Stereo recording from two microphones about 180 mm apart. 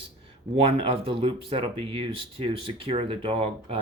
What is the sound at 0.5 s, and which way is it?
Speech, 30° right (ahead or behind).